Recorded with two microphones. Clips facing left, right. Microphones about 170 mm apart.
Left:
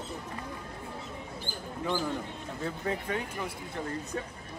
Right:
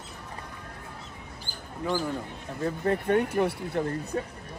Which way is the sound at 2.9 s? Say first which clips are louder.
Right 10 dB; 55° right (ahead or behind).